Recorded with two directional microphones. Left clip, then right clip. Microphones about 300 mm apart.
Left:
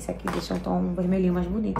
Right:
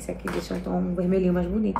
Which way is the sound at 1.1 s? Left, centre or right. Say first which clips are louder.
Right 4 dB; centre.